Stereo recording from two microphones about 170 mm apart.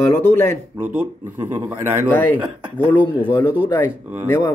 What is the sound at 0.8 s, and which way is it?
Speech, 10° right (ahead or behind).